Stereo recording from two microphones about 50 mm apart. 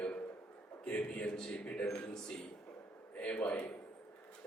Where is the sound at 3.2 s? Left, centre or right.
Left.